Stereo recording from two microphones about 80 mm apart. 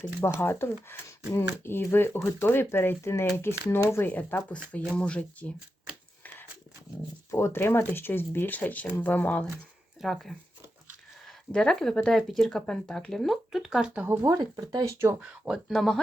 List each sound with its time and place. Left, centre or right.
0.3 s speech: left
7.3 s speech: left
10.0 s speech: centre
14.1 s speech: right
14.3 s speech: right
15.2 s speech: centre
15.7 s speech: centre